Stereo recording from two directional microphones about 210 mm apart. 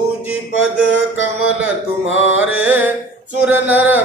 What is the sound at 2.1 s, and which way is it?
Mantra, 65° left (ahead or behind).